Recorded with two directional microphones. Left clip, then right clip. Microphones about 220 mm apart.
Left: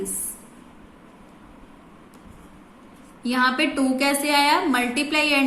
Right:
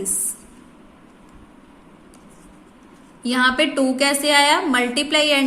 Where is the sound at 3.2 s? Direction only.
15° right (ahead or behind).